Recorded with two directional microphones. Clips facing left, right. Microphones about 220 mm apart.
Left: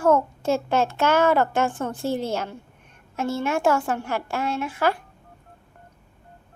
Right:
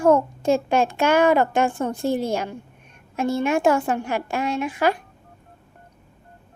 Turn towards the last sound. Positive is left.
turn(degrees=-15)  # may be behind; listen again after turning